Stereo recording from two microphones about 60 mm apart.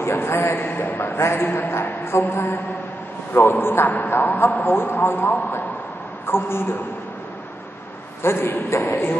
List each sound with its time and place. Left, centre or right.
0.0 s a man's voice: left
0.9 s a man's voice: left
6.2 s a man's voice: left
8.2 s a man's voice: left